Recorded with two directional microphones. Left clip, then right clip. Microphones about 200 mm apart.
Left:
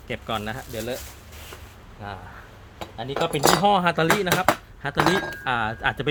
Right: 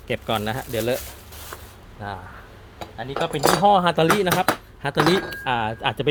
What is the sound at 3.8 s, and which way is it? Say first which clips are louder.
Speech: right 2 dB; 10° right (ahead or behind).